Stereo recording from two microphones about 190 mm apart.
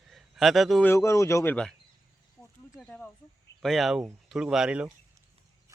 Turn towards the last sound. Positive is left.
turn(degrees=-5)  # may be behind; listen again after turning